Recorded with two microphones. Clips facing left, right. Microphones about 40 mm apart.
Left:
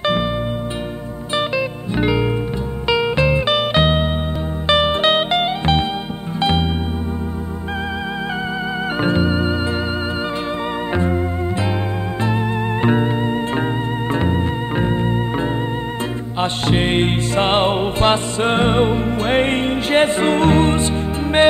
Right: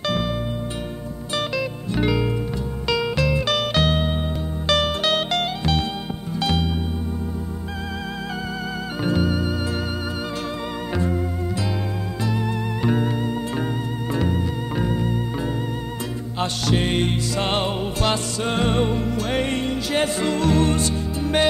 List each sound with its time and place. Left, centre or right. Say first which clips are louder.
1.3 s music: left 5 dB; left
9.0 s music: left 3 dB; left
12.8 s music: left 4 dB; left
16.3 s music: left 4 dB; left